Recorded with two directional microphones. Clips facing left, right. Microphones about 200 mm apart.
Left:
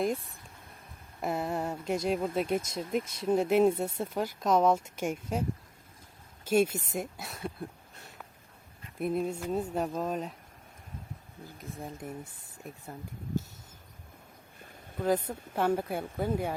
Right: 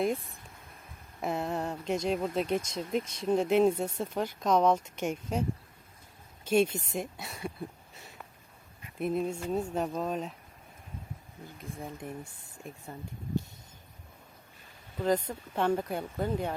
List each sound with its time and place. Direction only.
0.0 s speech: centre (ahead or behind)
11.8 s speech: centre (ahead or behind)
14.9 s speech: 5° left (ahead or behind)